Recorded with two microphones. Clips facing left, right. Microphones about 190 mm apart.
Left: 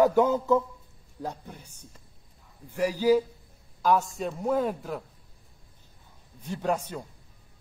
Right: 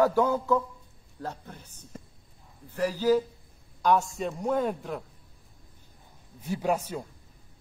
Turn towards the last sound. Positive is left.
turn(degrees=-10)  # may be behind; listen again after turning